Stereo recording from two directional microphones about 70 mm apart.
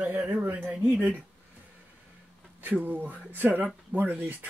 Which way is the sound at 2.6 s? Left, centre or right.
Right.